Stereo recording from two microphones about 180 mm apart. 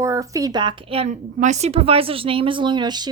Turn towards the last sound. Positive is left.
turn(degrees=-25)  # may be behind; listen again after turning